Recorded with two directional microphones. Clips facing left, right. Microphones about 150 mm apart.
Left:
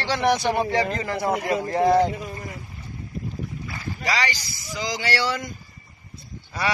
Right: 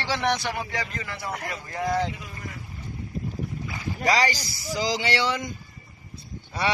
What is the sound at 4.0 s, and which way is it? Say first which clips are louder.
A man's voice: right 4 dB; 40° right (ahead or behind).